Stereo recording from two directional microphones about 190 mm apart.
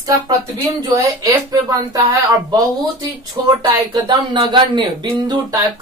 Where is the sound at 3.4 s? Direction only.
20° right (ahead or behind).